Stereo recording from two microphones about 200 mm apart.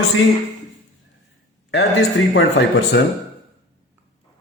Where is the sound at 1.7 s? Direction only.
70° left (ahead or behind).